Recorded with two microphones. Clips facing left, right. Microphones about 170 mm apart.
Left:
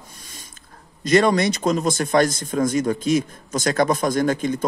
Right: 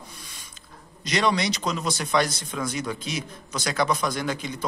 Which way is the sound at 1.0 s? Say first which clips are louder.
Left 7 dB; 50° left (ahead or behind).